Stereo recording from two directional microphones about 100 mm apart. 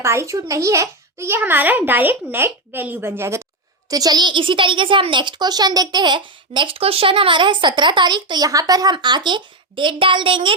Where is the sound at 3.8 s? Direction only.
40° right (ahead or behind).